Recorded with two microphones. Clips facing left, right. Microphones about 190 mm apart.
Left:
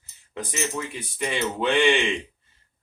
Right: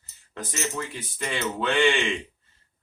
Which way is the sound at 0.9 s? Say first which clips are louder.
Left 3 dB; 15° left (ahead or behind).